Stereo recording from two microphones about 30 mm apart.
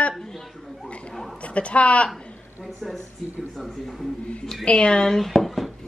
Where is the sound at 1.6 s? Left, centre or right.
Left.